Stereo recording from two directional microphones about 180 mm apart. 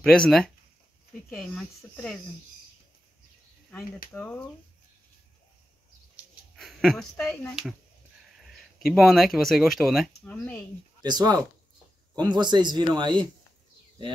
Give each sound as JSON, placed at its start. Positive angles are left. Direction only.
{"t": 0.0, "sound": "speech", "side_deg": 5}
{"t": 4.1, "sound": "speech", "side_deg": 10}
{"t": 6.5, "sound": "speech", "side_deg": 0}
{"t": 8.7, "sound": "speech", "side_deg": 0}
{"t": 10.2, "sound": "speech", "side_deg": 10}
{"t": 11.0, "sound": "speech", "side_deg": -25}